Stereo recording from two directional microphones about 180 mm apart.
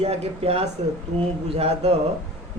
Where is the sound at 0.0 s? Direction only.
35° right (ahead or behind).